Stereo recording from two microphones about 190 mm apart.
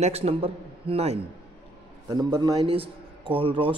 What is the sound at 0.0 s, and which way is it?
A man's voice, 30° right (ahead or behind).